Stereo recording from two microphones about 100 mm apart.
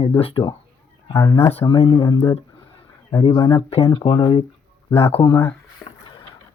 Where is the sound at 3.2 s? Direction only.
45° left (ahead or behind).